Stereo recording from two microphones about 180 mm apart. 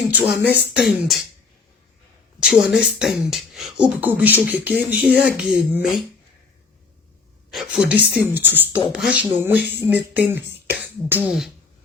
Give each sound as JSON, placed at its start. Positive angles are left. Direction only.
{"t": 0.1, "sound": "music", "side_deg": -5}
{"t": 0.8, "sound": "speech", "side_deg": 0}
{"t": 2.4, "sound": "speech", "side_deg": -5}
{"t": 7.5, "sound": "speech", "side_deg": -5}
{"t": 8.3, "sound": "music", "side_deg": -10}
{"t": 8.9, "sound": "speech", "side_deg": -5}
{"t": 9.8, "sound": "music", "side_deg": -10}
{"t": 10.7, "sound": "speech", "side_deg": -5}